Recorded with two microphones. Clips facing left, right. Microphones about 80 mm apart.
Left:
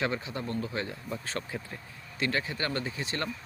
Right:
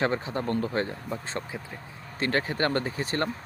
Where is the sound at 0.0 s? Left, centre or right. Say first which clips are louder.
Right 5 dB; right.